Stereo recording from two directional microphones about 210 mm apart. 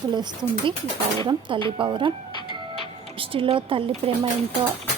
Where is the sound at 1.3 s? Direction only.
25° right (ahead or behind).